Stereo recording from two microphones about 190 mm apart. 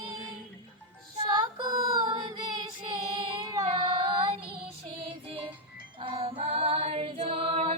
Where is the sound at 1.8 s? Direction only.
25° right (ahead or behind).